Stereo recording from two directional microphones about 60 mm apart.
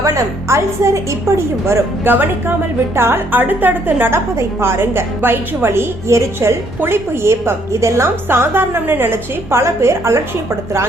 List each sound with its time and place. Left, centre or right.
0.0 s a woman's voice: right
2.0 s a woman's voice: right
3.4 s a woman's voice: right